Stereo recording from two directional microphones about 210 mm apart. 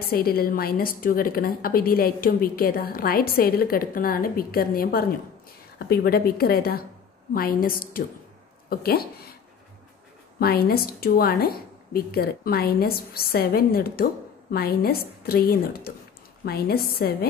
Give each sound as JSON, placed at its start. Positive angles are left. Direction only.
{"t": 0.0, "sound": "a woman's voice", "side_deg": 45}
{"t": 10.4, "sound": "a woman's voice", "side_deg": 50}